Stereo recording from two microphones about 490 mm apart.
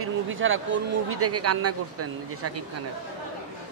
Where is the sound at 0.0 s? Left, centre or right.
Right.